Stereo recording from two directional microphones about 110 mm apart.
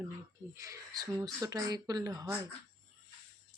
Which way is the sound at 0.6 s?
30° right (ahead or behind).